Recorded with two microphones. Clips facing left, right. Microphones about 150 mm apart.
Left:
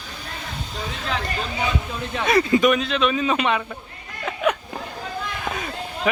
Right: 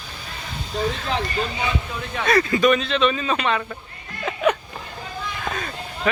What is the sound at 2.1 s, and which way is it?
Speech, 15° left (ahead or behind).